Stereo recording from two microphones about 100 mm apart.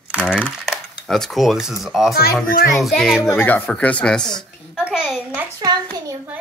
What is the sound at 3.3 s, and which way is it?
Speech, 20° left (ahead or behind).